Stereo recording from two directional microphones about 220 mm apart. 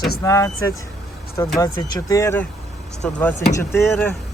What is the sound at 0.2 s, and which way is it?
Speech, 15° left (ahead or behind).